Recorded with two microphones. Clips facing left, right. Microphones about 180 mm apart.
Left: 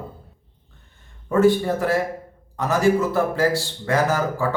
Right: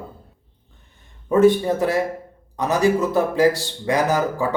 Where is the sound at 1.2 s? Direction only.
20° right (ahead or behind).